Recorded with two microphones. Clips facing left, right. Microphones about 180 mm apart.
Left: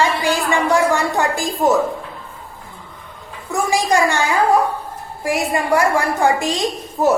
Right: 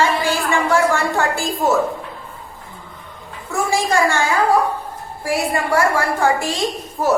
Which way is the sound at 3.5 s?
15° left (ahead or behind).